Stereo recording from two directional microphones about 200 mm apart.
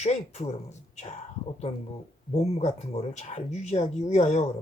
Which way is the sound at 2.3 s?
30° left (ahead or behind).